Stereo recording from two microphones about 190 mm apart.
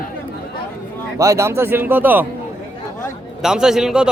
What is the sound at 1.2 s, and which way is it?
Speech, 15° right (ahead or behind).